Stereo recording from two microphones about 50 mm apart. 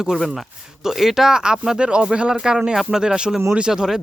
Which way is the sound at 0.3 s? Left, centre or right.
Centre.